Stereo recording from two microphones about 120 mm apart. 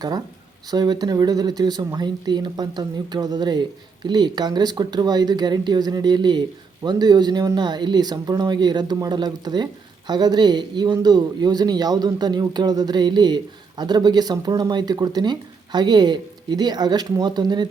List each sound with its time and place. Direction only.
0.7 s speech: 35° right (ahead or behind)